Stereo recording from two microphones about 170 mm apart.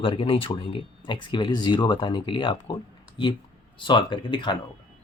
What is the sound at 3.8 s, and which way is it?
Speech, 30° left (ahead or behind).